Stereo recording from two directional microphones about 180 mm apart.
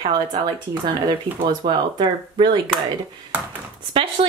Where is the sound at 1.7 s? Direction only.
25° right (ahead or behind).